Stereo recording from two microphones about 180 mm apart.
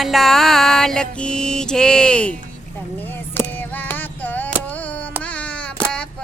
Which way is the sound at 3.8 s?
10° left (ahead or behind).